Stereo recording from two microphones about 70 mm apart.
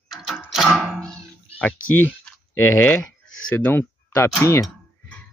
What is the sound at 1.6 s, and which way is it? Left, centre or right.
Speech, left.